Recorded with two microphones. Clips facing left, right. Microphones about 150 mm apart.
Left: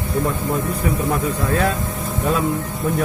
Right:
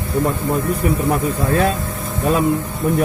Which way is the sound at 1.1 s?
20° right (ahead or behind).